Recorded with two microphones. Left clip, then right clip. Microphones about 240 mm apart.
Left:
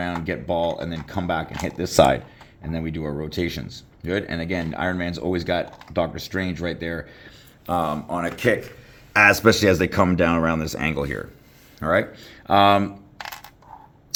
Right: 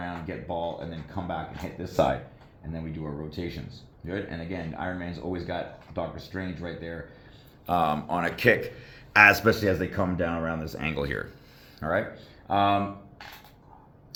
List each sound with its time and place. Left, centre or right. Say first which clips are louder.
0.0 s speech: left 8 dB; left
7.7 s speech: left 1 dB; left
11.8 s speech: left 7 dB; left